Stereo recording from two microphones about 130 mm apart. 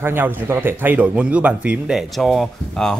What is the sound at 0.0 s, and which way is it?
A man's voice, 15° right (ahead or behind).